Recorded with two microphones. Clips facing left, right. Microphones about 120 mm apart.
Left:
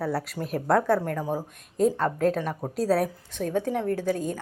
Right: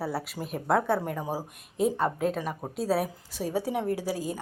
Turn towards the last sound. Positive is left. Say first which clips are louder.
# left 3 dB
turn(degrees=-5)  # may be behind; listen again after turning